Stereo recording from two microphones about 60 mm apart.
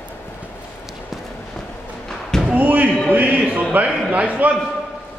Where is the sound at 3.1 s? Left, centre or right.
Right.